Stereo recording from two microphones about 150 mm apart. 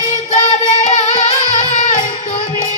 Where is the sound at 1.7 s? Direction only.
55° left (ahead or behind).